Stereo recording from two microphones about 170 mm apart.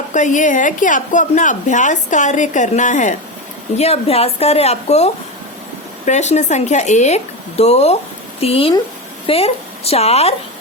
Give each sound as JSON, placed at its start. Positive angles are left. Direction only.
{"t": 0.1, "sound": "a woman's voice", "side_deg": 45}
{"t": 3.8, "sound": "a woman's voice", "side_deg": 35}